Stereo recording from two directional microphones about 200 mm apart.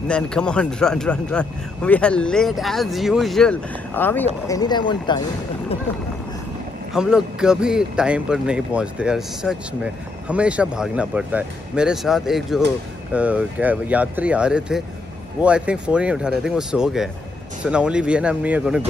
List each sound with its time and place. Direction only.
0.1 s speech: 5° left (ahead or behind)
4.5 s speech: 20° left (ahead or behind)
6.9 s speech: 5° right (ahead or behind)